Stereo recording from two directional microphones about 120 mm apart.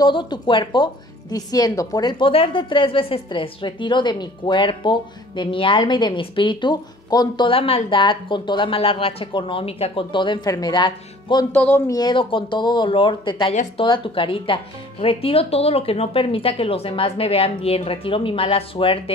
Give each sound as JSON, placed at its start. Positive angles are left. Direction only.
{"t": 0.0, "sound": "speech", "side_deg": 40}
{"t": 1.3, "sound": "speech", "side_deg": 30}
{"t": 11.5, "sound": "speech", "side_deg": 15}
{"t": 11.9, "sound": "speech", "side_deg": 40}